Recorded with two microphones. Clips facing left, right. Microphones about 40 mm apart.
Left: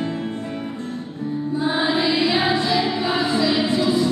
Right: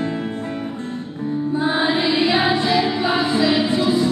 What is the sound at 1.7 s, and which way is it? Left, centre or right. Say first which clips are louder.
Music: even; right.